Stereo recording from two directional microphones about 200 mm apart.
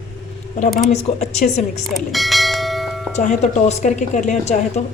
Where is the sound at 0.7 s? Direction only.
35° left (ahead or behind).